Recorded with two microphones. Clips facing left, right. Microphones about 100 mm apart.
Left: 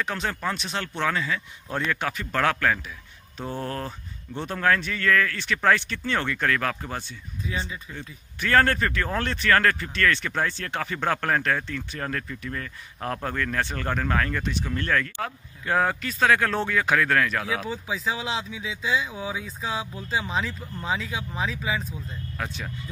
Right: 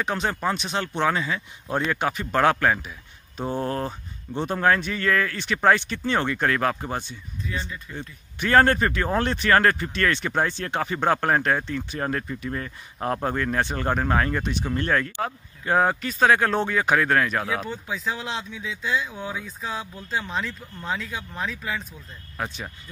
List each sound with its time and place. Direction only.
0.0 s speech: 20° right (ahead or behind)
7.4 s speech: 5° left (ahead or behind)
8.4 s speech: 20° right (ahead or behind)
17.5 s speech: centre (ahead or behind)